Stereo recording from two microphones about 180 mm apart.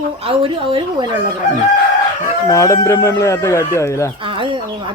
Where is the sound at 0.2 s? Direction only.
30° right (ahead or behind).